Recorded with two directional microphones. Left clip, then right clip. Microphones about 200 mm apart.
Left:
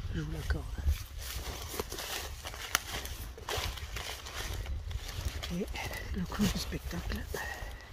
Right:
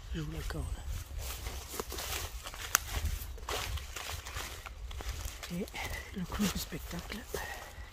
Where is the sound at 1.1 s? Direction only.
15° left (ahead or behind).